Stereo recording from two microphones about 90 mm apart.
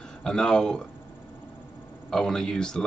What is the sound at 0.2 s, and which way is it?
Speech, 10° left (ahead or behind).